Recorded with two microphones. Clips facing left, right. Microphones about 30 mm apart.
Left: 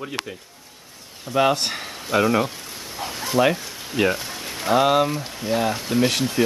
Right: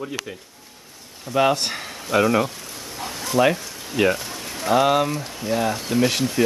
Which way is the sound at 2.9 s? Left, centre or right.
Centre.